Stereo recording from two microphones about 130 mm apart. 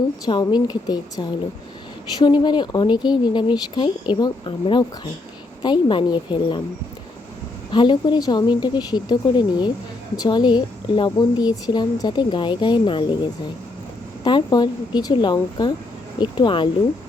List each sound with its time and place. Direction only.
0.3 s a woman's voice: 35° left (ahead or behind)
7.7 s a woman's voice: 40° left (ahead or behind)
14.3 s a woman's voice: 35° left (ahead or behind)